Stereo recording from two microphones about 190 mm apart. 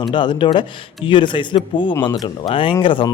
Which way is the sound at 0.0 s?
25° left (ahead or behind).